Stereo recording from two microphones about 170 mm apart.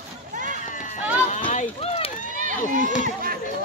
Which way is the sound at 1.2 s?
40° left (ahead or behind).